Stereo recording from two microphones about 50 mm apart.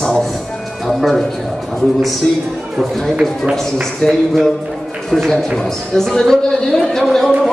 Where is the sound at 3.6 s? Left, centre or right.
Centre.